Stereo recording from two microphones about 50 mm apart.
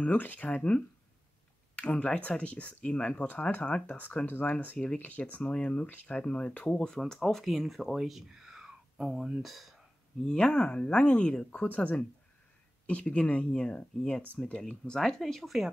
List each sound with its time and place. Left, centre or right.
0.0 s speech: left
4.3 s speech: left; by 9.8 s centre
10.2 s speech: centre